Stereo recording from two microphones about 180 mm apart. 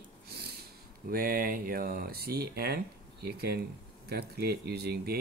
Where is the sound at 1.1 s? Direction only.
55° right (ahead or behind).